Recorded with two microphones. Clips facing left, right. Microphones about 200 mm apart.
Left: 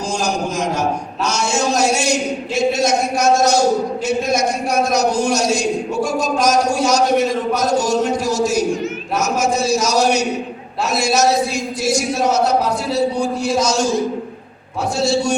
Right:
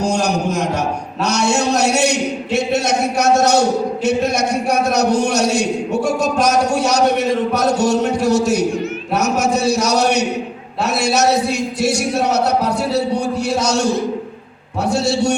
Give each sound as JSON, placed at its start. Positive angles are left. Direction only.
{"t": 0.0, "sound": "a man's voice", "side_deg": -65}